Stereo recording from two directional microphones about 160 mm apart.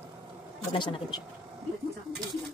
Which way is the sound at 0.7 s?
30° left (ahead or behind).